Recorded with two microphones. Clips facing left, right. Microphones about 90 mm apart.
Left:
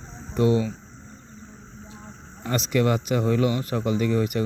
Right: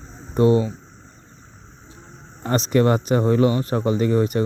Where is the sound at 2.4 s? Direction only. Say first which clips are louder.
Right 5 dB; 40° right (ahead or behind).